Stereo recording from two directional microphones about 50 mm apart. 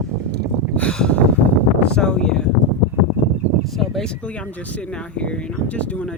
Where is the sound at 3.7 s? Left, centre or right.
Centre.